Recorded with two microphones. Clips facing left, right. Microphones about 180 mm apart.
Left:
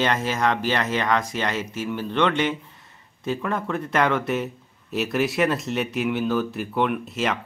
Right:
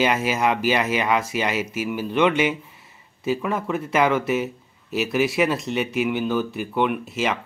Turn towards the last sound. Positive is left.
turn(degrees=0)  # may be behind; listen again after turning